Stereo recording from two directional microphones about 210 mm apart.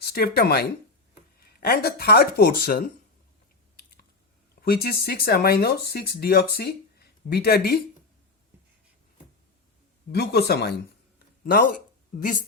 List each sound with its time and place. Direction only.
0.0 s speech: 50° left (ahead or behind)
1.6 s speech: 45° left (ahead or behind)
4.6 s speech: 45° left (ahead or behind)
10.1 s speech: 50° left (ahead or behind)